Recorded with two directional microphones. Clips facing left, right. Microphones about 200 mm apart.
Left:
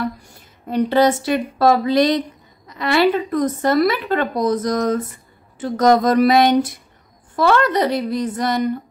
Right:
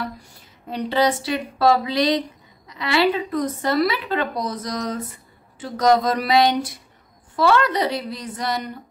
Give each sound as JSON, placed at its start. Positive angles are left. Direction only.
{"t": 0.7, "sound": "speech", "side_deg": 50}